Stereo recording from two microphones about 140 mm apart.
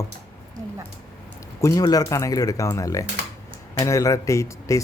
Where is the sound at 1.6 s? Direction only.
25° left (ahead or behind).